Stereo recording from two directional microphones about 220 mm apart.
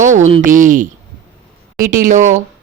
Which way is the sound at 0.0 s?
35° right (ahead or behind).